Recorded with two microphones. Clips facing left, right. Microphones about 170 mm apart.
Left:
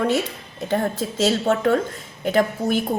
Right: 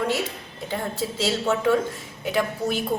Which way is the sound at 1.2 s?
50° left (ahead or behind).